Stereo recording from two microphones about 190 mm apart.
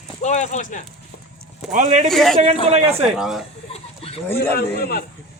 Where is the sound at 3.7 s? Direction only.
30° left (ahead or behind).